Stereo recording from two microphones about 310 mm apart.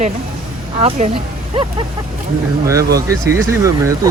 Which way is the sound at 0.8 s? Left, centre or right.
Right.